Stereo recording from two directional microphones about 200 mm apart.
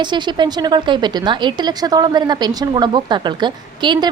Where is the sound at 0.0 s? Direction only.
20° right (ahead or behind).